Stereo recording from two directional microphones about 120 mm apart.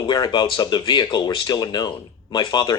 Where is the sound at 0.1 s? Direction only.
40° left (ahead or behind).